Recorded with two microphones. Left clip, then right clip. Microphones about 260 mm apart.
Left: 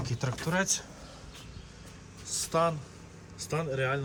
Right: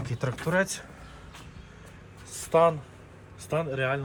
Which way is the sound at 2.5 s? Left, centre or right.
Centre.